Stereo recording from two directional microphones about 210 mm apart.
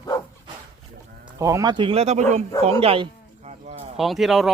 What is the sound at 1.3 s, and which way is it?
Speech, 15° right (ahead or behind).